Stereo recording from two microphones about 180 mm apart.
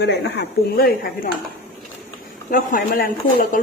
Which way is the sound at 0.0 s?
70° left (ahead or behind).